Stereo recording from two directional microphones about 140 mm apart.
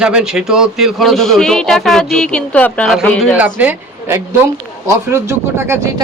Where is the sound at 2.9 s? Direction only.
Centre (ahead or behind).